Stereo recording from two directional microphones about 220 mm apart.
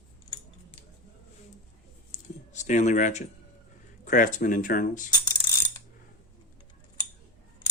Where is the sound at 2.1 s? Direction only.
35° left (ahead or behind).